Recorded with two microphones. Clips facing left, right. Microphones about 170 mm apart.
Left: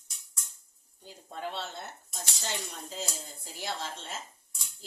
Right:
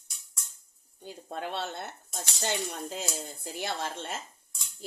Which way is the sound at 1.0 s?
60° right (ahead or behind).